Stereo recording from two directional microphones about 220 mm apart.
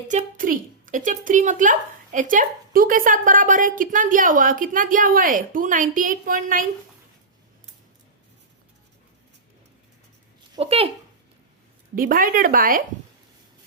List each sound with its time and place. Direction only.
0.1 s a woman's voice: 35° right (ahead or behind)
10.5 s speech: 25° right (ahead or behind)
11.9 s a woman's voice: 40° right (ahead or behind)